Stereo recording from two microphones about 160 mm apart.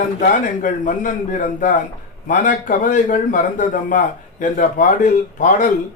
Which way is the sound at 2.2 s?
55° left (ahead or behind).